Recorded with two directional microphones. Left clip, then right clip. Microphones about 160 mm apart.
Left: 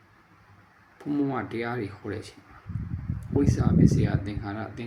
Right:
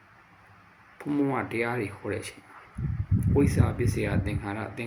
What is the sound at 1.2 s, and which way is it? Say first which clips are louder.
Speech: right 2 dB; 15° left (ahead or behind).